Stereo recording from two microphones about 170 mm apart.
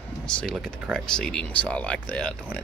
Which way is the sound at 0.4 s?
5° left (ahead or behind).